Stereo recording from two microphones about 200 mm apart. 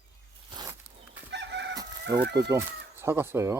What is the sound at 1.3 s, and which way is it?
Chicken, 60° right (ahead or behind).